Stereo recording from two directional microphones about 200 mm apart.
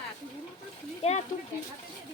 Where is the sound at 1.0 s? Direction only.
30° left (ahead or behind).